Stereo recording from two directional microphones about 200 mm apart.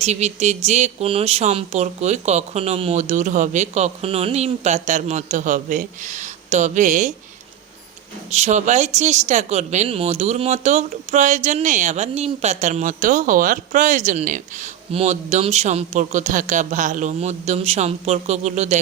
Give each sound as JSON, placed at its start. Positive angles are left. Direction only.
{"t": 0.0, "sound": "speech", "side_deg": -35}
{"t": 8.3, "sound": "speech", "side_deg": -35}